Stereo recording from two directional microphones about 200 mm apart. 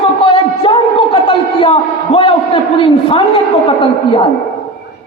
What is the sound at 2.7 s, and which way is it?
A man's voice, 25° left (ahead or behind).